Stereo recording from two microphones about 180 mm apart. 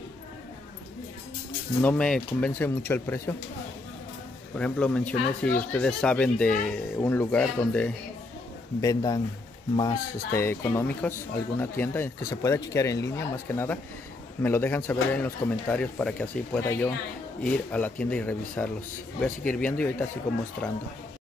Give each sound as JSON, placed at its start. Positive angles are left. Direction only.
{"t": 1.8, "sound": "speech", "side_deg": 10}
{"t": 4.6, "sound": "speech", "side_deg": 5}
{"t": 8.8, "sound": "speech", "side_deg": 20}
{"t": 10.4, "sound": "speech", "side_deg": 10}